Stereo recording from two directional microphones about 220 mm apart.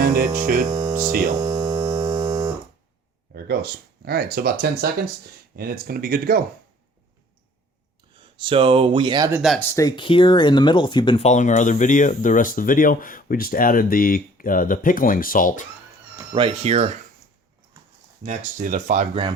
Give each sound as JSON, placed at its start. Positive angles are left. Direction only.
{"t": 0.0, "sound": "mains hum", "side_deg": -40}
{"t": 0.3, "sound": "speech", "side_deg": -40}
{"t": 0.7, "sound": "hum", "side_deg": -15}
{"t": 1.4, "sound": "music", "side_deg": -15}
{"t": 3.4, "sound": "speech", "side_deg": -45}
{"t": 8.4, "sound": "speech", "side_deg": -25}
{"t": 9.4, "sound": "speech", "side_deg": 0}
{"t": 9.7, "sound": "speech", "side_deg": 20}
{"t": 16.1, "sound": "speech", "side_deg": -25}
{"t": 18.3, "sound": "speech", "side_deg": -35}